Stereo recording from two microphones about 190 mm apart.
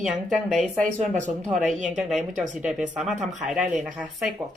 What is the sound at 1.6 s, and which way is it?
Speech, centre (ahead or behind).